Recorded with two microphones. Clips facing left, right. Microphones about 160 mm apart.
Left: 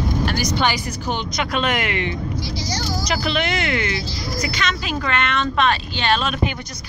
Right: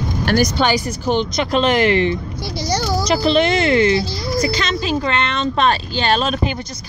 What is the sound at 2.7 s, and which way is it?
Speech, 60° right (ahead or behind).